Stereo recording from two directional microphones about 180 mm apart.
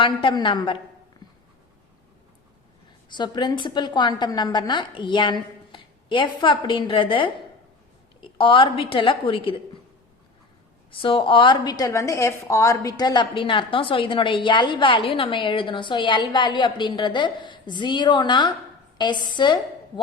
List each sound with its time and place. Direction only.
0.0 s a woman's voice: 25° left (ahead or behind)
3.1 s a woman's voice: 25° left (ahead or behind)
10.9 s a woman's voice: 30° left (ahead or behind)